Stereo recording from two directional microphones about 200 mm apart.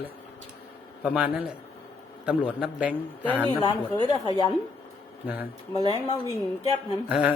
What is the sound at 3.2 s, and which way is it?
Speech, 10° left (ahead or behind).